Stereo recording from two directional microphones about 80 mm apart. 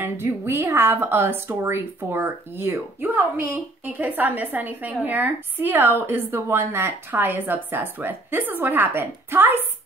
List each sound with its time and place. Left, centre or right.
0.0 s a woman's voice: right